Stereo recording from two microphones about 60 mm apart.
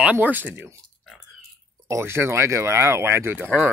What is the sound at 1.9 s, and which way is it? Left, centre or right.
Speech, right.